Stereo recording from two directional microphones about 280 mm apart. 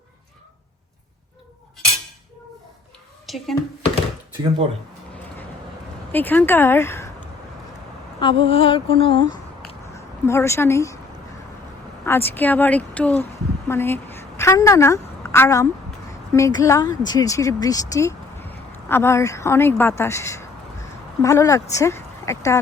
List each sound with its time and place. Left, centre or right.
3.2 s a child's voice: centre
4.4 s speech: centre
6.1 s speech: centre
8.2 s female singing: centre
9.9 s a woman's voice: centre
12.0 s a woman's voice: centre